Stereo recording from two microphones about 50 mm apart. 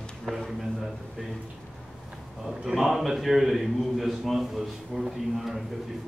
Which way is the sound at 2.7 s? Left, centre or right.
Centre.